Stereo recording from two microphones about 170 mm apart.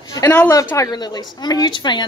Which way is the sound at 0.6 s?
20° left (ahead or behind).